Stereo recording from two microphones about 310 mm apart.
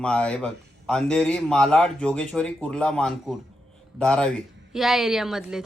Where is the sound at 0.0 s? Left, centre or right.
Centre.